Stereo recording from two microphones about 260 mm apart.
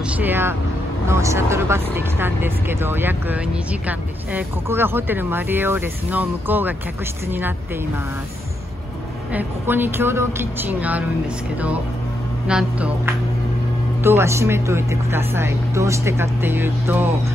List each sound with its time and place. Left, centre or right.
0.2 s speech: centre
9.3 s speech: centre
12.4 s speech: centre